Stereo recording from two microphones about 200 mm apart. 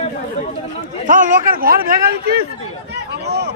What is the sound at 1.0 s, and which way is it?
Speech, 40° right (ahead or behind).